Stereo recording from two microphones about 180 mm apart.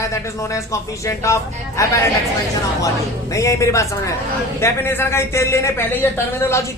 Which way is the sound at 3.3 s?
15° left (ahead or behind).